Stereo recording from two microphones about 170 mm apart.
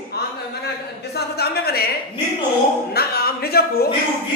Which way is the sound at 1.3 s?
65° left (ahead or behind).